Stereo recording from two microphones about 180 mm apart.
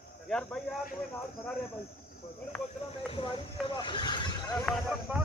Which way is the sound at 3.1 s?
30° left (ahead or behind).